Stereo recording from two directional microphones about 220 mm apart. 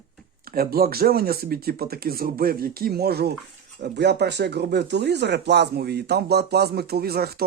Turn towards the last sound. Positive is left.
turn(degrees=-45)  # may be behind; listen again after turning